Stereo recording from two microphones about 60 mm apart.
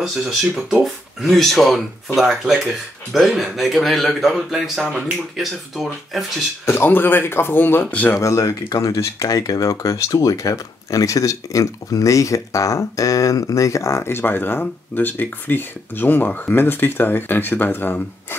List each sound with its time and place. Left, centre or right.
0.0 s speech: centre
0.8 s speech: centre
6.6 s speech: left
8.2 s speech: left